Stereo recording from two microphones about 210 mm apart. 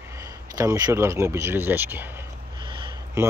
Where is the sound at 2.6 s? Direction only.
20° right (ahead or behind).